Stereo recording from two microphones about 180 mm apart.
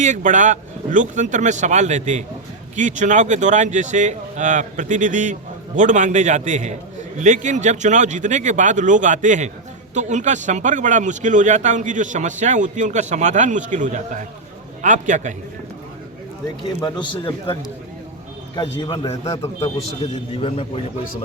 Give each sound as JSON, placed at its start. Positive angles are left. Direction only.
{"t": 0.0, "sound": "speech", "side_deg": -45}
{"t": 16.8, "sound": "a man's voice", "side_deg": 25}
{"t": 18.7, "sound": "a man's voice", "side_deg": 15}
{"t": 19.6, "sound": "a man's voice", "side_deg": 35}